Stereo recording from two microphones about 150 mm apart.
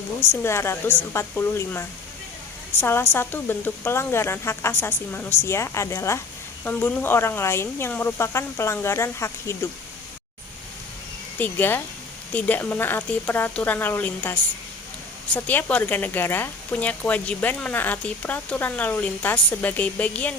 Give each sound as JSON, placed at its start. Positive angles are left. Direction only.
{"t": 0.2, "sound": "speech", "side_deg": 15}
{"t": 11.3, "sound": "speech", "side_deg": 15}